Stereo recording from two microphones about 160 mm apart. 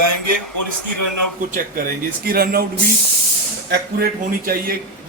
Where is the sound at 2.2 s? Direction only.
65° right (ahead or behind).